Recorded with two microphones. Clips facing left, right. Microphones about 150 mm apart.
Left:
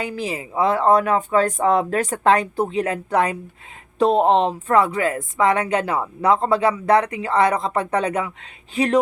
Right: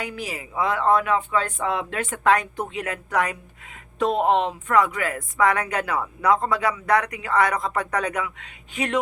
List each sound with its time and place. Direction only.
0.0 s speech: 30° left (ahead or behind)